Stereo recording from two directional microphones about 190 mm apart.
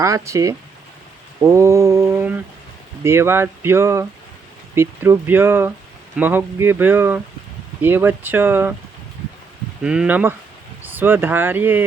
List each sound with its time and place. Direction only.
0.0 s speech: 15° right (ahead or behind)
9.8 s speech: 5° right (ahead or behind)